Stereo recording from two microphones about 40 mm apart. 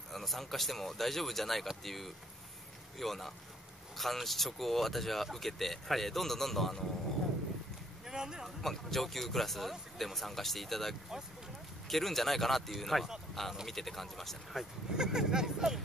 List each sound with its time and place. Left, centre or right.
0.1 s speech: centre
8.1 s speech: centre
8.6 s speech: centre
15.0 s speech: centre